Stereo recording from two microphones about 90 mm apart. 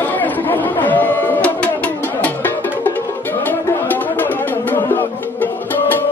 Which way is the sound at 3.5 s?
20° left (ahead or behind).